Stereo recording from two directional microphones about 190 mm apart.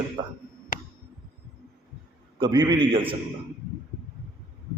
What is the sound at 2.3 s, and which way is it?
Speech, 25° right (ahead or behind).